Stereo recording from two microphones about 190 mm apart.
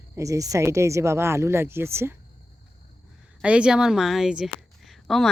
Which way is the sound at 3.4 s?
5° right (ahead or behind).